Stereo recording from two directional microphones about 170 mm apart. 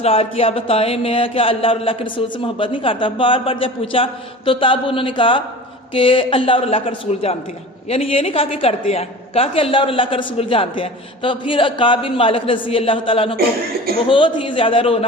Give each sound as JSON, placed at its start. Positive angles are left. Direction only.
{"t": 0.0, "sound": "a woman's voice", "side_deg": 35}